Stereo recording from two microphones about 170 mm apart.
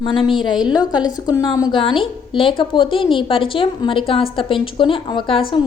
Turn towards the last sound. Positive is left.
turn(degrees=30)  # may be behind; listen again after turning